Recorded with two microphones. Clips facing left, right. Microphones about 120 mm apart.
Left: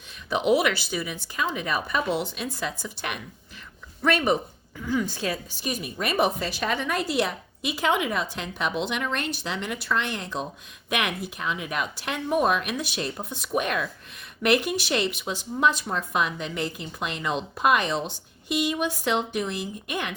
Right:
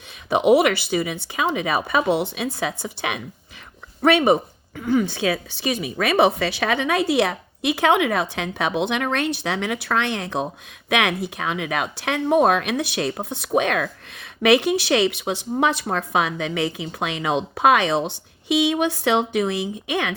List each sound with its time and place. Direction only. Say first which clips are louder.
0.3 s speech: right 6 dB; 65° right (ahead or behind)